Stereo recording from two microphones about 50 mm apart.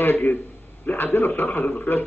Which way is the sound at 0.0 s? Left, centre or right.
Left.